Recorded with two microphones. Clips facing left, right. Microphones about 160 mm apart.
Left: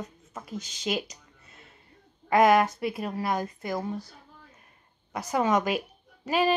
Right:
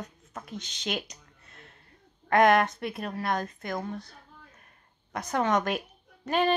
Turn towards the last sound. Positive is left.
turn(degrees=5)  # may be behind; listen again after turning